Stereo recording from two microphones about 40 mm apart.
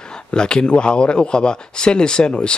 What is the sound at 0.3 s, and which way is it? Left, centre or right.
Speech, left.